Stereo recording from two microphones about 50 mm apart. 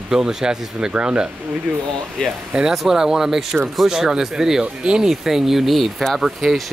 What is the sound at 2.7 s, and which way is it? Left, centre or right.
Speech, centre.